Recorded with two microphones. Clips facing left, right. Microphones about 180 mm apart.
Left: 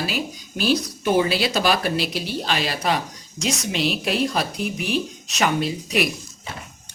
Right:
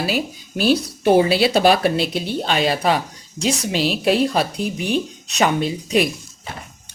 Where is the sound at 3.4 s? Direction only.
30° right (ahead or behind).